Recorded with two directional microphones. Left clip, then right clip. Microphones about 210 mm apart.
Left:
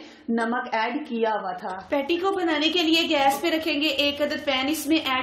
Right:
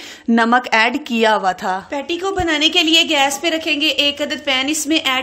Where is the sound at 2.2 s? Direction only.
30° right (ahead or behind).